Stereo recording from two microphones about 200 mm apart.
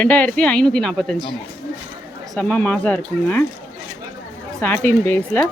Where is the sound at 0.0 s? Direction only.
5° left (ahead or behind).